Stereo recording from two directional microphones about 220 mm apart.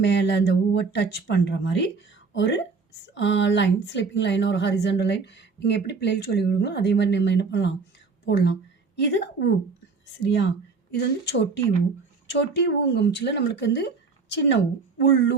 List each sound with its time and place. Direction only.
0.0 s speech: 50° left (ahead or behind)